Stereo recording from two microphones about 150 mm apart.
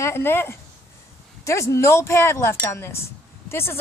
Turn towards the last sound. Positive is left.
turn(degrees=15)  # may be behind; listen again after turning